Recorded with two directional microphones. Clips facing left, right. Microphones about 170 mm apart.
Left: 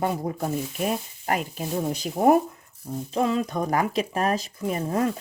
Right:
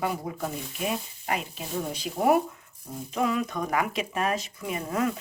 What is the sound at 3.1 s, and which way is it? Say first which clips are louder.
Speech: left 3 dB; 30° left (ahead or behind).